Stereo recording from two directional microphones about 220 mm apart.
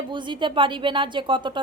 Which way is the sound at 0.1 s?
20° right (ahead or behind).